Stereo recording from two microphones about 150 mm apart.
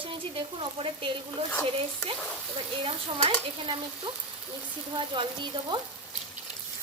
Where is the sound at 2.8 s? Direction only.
35° right (ahead or behind).